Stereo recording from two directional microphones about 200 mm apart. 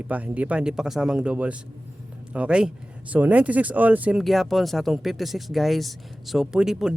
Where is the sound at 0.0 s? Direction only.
5° right (ahead or behind).